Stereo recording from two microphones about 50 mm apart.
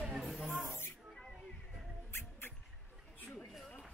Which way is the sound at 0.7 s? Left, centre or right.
Left.